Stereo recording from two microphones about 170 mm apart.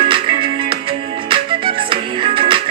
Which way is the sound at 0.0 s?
30° right (ahead or behind).